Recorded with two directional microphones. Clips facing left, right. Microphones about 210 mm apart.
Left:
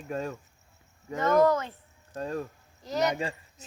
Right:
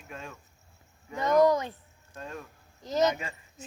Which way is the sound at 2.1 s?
35° left (ahead or behind).